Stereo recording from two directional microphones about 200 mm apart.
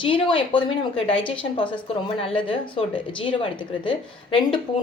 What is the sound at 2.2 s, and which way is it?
A woman's voice, 25° left (ahead or behind).